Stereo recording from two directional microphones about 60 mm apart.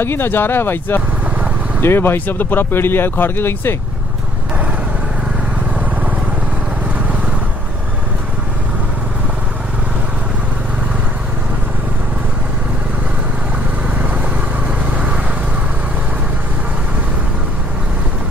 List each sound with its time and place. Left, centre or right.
0.0 s speech: left